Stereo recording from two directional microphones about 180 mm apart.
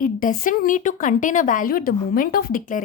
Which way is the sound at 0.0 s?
50° left (ahead or behind).